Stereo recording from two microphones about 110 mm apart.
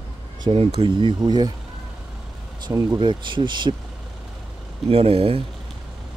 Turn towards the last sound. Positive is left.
turn(degrees=-60)  # may be behind; listen again after turning